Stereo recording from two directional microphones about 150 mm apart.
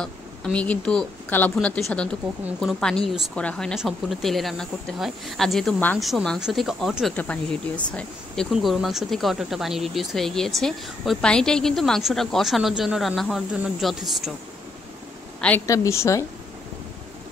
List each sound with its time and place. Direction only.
0.0 s speech: 5° left (ahead or behind)
15.6 s a woman's voice: 20° left (ahead or behind)